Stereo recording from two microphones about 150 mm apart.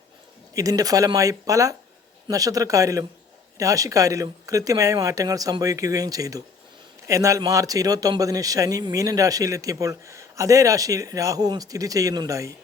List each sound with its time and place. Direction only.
0.5 s a man's voice: 25° right (ahead or behind)